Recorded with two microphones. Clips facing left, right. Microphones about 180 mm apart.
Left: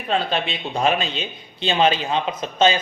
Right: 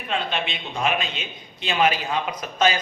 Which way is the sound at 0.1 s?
35° left (ahead or behind).